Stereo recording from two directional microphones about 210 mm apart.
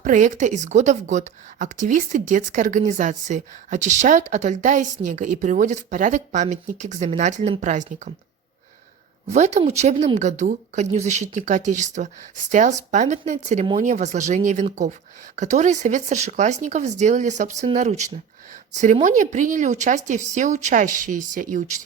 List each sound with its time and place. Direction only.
0.0 s a woman's voice: 35° right (ahead or behind)
9.2 s a woman's voice: 35° right (ahead or behind)